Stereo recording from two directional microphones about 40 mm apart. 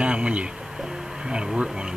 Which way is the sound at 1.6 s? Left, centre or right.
Centre.